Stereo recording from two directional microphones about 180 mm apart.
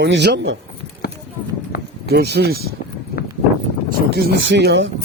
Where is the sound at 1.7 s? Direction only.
55° left (ahead or behind).